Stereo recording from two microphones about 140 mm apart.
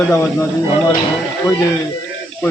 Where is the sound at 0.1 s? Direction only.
20° left (ahead or behind).